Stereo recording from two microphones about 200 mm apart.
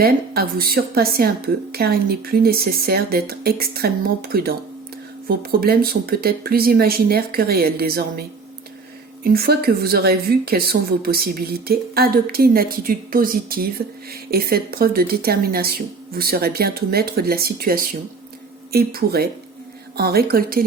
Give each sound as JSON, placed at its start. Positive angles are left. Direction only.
{"t": 0.0, "sound": "a woman's voice", "side_deg": -50}
{"t": 9.2, "sound": "a woman's voice", "side_deg": -50}